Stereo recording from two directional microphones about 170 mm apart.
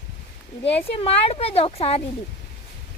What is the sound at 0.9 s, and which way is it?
Speech, 35° left (ahead or behind).